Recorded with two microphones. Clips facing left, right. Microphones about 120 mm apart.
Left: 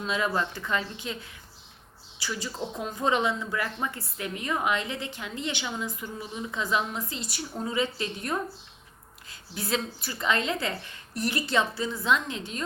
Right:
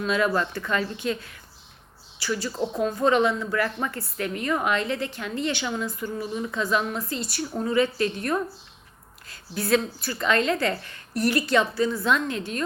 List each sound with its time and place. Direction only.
0.0 s a woman's voice: 20° left (ahead or behind)
9.6 s a woman's voice: 20° left (ahead or behind)
12.3 s a woman's voice: 65° right (ahead or behind)